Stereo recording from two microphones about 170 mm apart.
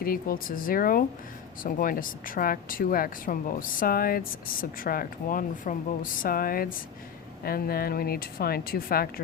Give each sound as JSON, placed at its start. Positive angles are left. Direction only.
{"t": 0.0, "sound": "speech", "side_deg": 60}